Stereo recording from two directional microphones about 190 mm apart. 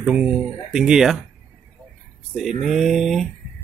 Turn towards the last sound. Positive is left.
turn(degrees=0)  # may be behind; listen again after turning